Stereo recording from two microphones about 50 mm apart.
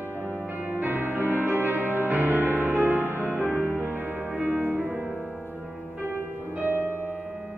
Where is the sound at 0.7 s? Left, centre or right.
Right.